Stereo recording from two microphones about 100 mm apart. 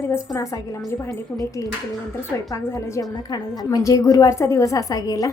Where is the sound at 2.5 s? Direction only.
35° left (ahead or behind).